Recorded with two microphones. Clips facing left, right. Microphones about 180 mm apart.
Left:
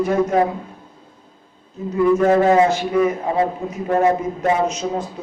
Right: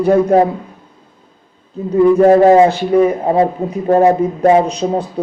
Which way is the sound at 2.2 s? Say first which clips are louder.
Right 7 dB; 35° right (ahead or behind).